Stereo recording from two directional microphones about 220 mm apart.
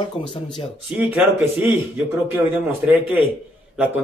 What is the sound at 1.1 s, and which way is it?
Speech, 5° right (ahead or behind).